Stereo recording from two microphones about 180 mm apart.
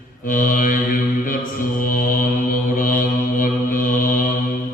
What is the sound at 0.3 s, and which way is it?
Mantra, 50° left (ahead or behind).